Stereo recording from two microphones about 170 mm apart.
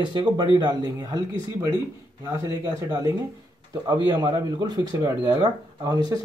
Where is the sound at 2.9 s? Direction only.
20° right (ahead or behind).